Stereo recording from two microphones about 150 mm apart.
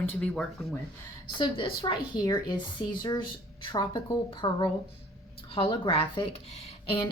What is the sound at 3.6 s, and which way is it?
Speech, 30° left (ahead or behind).